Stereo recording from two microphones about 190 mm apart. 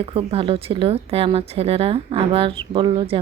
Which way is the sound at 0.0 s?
30° right (ahead or behind).